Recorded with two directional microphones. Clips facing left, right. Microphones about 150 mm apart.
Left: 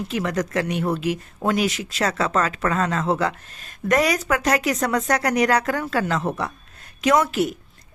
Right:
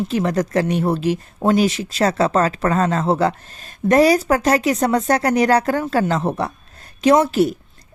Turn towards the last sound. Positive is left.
turn(degrees=-35)  # may be behind; listen again after turning